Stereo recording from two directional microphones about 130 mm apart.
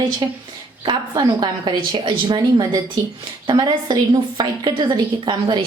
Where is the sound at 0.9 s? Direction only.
35° right (ahead or behind).